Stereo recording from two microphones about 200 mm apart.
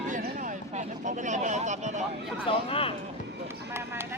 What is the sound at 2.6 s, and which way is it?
Speech, 25° left (ahead or behind).